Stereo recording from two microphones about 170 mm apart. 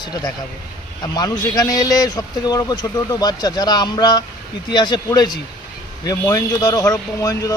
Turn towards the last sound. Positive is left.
turn(degrees=20)  # may be behind; listen again after turning